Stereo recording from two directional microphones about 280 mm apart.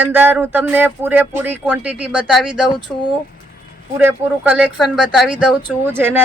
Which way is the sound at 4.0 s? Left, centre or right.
Centre.